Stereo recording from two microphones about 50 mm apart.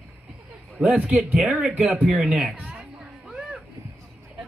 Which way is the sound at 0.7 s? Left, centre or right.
Right.